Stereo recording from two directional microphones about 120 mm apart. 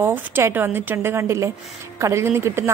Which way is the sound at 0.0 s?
20° right (ahead or behind).